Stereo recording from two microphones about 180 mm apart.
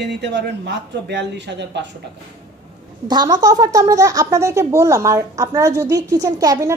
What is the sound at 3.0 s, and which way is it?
A woman's voice, 20° right (ahead or behind).